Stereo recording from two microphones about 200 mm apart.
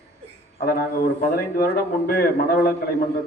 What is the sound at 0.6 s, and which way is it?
A man's voice, 50° left (ahead or behind).